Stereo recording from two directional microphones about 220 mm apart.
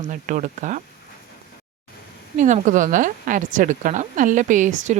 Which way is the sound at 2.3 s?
35° right (ahead or behind).